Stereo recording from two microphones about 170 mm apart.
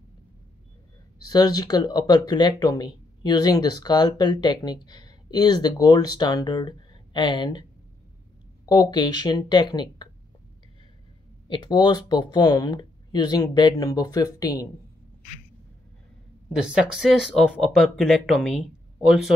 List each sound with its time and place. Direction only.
1.2 s speech: 25° left (ahead or behind)
8.6 s speech: 25° left (ahead or behind)
11.4 s speech: 30° left (ahead or behind)
16.5 s speech: 5° right (ahead or behind)